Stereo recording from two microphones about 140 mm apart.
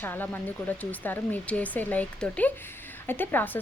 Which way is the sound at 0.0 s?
15° left (ahead or behind).